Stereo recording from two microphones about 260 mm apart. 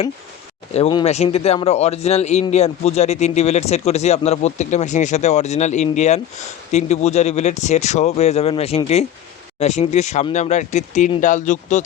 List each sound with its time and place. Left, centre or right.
0.7 s speech: left